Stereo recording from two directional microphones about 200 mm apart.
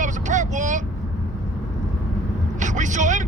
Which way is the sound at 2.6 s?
40° right (ahead or behind).